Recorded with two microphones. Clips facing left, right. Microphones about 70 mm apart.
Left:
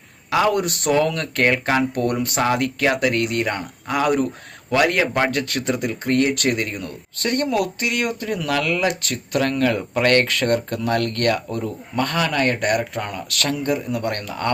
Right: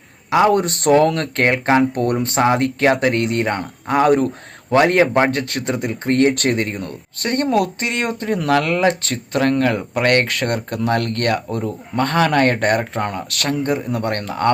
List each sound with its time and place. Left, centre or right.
0.3 s speech: right